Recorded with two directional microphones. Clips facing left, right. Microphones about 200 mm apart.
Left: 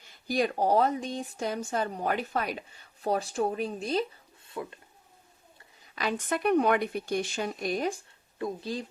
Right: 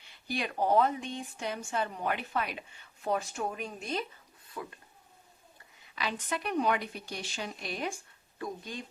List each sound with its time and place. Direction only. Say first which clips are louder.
0.0 s speech: left 8 dB; 40° left (ahead or behind); by 4.8 s 25° left (ahead or behind)
5.8 s speech: left 5 dB; 45° left (ahead or behind)